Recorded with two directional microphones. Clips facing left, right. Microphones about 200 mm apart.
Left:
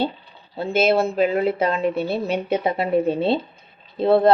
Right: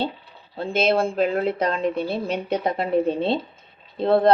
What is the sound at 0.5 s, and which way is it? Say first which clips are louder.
Speech: left 2 dB; 5° left (ahead or behind).